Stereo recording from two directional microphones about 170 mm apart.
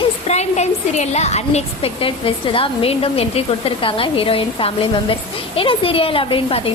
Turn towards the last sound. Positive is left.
turn(degrees=30)  # may be behind; listen again after turning